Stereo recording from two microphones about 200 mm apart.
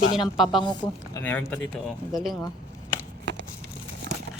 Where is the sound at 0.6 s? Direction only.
20° left (ahead or behind).